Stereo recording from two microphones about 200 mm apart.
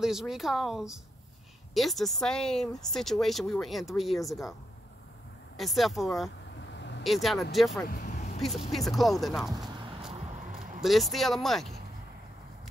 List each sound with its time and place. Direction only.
0.0 s speech: centre (ahead or behind)
5.6 s speech: centre (ahead or behind)
6.7 s vehicle: 60° left (ahead or behind)
7.0 s speech: centre (ahead or behind)
7.9 s vehicle: 40° left (ahead or behind)
8.4 s speech: centre (ahead or behind)